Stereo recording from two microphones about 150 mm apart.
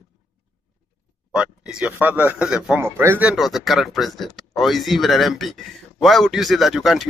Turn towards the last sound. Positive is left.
turn(degrees=0)  # may be behind; listen again after turning